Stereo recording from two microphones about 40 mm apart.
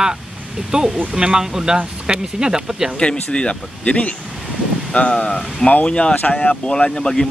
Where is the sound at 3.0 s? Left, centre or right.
Left.